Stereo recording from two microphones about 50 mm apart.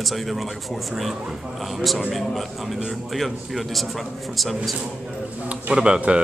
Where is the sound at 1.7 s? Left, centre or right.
Centre.